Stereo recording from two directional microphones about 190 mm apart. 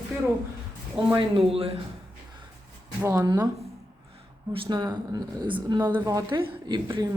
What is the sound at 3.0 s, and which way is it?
Speech, 15° right (ahead or behind).